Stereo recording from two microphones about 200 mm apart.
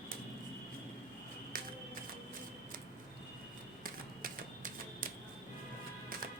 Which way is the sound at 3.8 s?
45° right (ahead or behind).